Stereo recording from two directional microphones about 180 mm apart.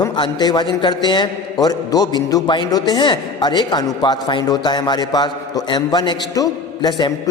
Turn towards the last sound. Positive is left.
turn(degrees=25)  # may be behind; listen again after turning